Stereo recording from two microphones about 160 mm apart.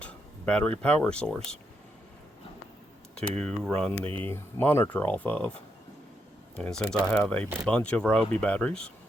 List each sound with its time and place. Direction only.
0.0 s speech: 10° left (ahead or behind)
3.2 s speech: 5° left (ahead or behind)
6.6 s speech: 5° left (ahead or behind)